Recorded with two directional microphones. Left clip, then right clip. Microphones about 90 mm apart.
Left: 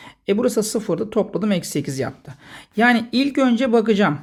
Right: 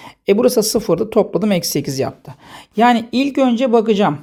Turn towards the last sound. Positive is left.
turn(degrees=-30)  # may be behind; listen again after turning